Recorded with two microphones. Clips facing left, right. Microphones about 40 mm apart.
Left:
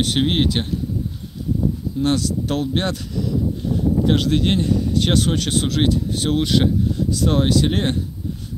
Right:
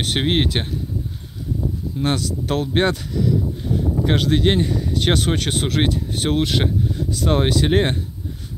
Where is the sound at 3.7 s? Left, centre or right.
Right.